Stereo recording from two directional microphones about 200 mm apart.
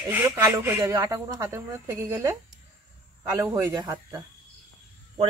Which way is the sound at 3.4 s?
15° right (ahead or behind).